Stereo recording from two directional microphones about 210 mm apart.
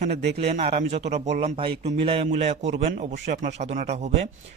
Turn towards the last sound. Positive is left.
turn(degrees=-35)  # may be behind; listen again after turning